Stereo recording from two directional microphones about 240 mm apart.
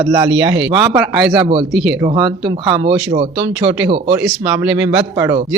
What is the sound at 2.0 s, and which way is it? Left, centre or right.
Speech, centre.